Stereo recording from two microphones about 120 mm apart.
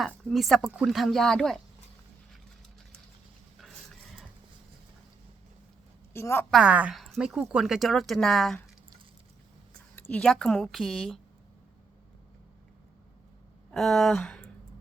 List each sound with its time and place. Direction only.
0.3 s speech: centre (ahead or behind)
6.1 s a woman's voice: 20° left (ahead or behind)
6.5 s a woman's voice: 10° right (ahead or behind)
6.9 s speech: centre (ahead or behind)
9.9 s speech: 10° left (ahead or behind)
13.7 s speech: 5° left (ahead or behind)